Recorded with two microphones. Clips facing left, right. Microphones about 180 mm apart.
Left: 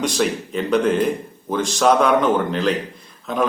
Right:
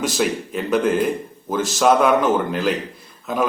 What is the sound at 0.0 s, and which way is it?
A man's voice, 5° right (ahead or behind).